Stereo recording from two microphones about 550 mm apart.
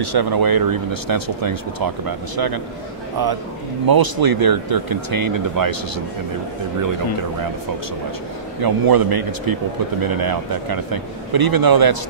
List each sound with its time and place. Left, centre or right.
0.0 s speech: right
3.8 s speech: right
8.5 s speech: right